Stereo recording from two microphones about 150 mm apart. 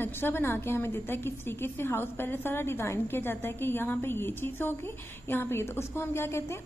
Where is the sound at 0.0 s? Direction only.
15° left (ahead or behind).